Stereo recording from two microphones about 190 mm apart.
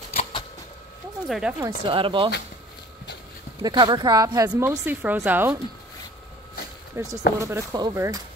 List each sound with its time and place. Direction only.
0.1 s a sound: 35° left (ahead or behind)
1.2 s speech: 5° right (ahead or behind)
1.9 s speech: 25° right (ahead or behind)
3.6 s speech: 25° right (ahead or behind)
7.0 s speech: 15° right (ahead or behind)